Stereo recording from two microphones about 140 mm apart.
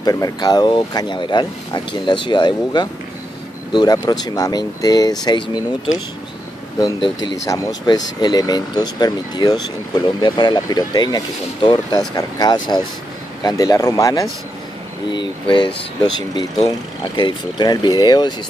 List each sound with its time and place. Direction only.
0.0 s speech: 25° left (ahead or behind)
7.0 s speech: 30° left (ahead or behind)
15.5 s speech: 30° left (ahead or behind)